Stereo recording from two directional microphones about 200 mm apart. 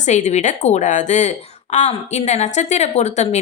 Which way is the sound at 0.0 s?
35° left (ahead or behind).